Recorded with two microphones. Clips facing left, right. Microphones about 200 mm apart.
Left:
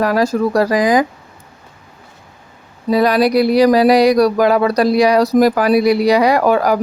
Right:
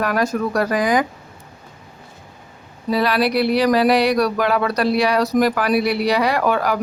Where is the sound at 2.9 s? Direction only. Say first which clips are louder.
Left 6 dB; 45° left (ahead or behind).